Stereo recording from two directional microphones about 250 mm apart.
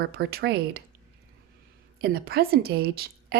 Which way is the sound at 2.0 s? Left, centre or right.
Right.